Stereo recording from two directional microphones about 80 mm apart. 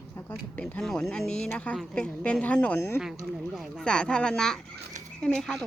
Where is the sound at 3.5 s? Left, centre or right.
Centre.